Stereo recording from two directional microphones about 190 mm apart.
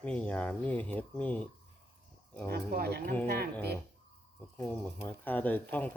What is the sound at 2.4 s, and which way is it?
Speech, 55° right (ahead or behind).